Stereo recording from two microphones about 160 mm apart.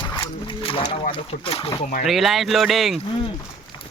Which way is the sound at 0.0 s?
30° left (ahead or behind).